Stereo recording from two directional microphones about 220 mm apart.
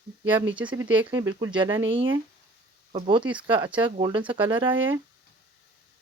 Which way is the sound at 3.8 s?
25° right (ahead or behind).